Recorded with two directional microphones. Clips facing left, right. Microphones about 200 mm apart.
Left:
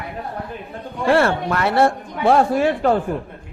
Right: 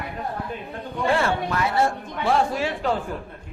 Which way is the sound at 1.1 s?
65° left (ahead or behind).